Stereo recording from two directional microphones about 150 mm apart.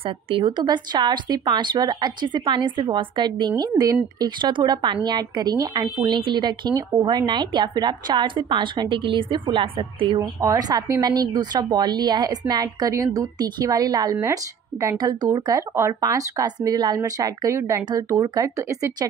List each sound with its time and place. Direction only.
0.0 s speech: 35° right (ahead or behind)
10.4 s speech: 25° right (ahead or behind)